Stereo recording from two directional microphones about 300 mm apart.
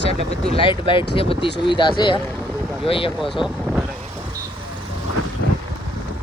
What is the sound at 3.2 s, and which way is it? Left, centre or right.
Speech, centre.